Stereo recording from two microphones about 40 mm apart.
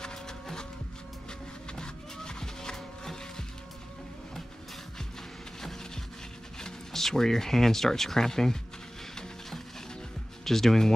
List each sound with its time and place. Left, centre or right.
0.0 s a sound: centre
1.8 s music: centre
6.6 s speech: centre
10.4 s speech: centre